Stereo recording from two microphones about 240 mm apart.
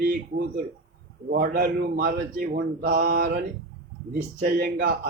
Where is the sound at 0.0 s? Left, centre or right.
Right.